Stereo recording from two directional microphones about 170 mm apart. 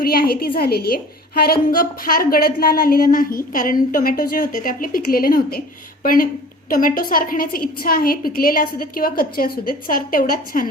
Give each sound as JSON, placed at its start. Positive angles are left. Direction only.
{"t": 0.0, "sound": "a woman's voice", "side_deg": 60}